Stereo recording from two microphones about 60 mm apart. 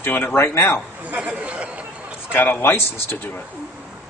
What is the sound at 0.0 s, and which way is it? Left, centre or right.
Speech, left.